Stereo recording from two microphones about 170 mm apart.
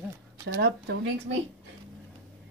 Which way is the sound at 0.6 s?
80° right.